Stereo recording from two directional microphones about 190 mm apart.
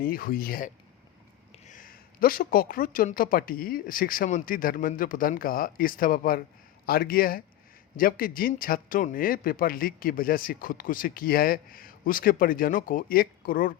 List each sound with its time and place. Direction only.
0.0 s a man's voice: 50° left (ahead or behind)